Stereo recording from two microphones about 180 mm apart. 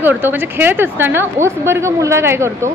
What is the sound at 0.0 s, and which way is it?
Speech, 10° right (ahead or behind).